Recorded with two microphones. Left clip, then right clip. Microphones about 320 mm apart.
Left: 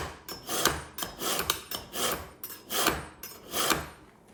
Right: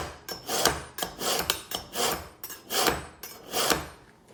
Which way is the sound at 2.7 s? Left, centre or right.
Centre.